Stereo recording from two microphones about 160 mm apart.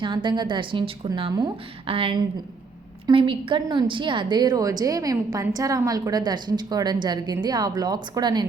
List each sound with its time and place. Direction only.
0.0 s a woman's voice: 30° right (ahead or behind)